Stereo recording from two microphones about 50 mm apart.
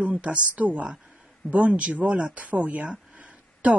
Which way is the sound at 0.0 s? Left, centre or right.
Right.